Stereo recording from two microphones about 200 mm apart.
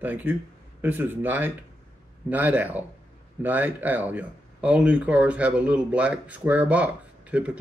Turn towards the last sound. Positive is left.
turn(degrees=-5)  # may be behind; listen again after turning